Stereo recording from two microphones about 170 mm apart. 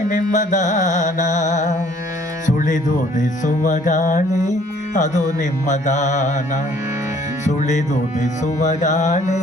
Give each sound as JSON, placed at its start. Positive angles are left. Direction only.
{"t": 0.1, "sound": "music", "side_deg": 50}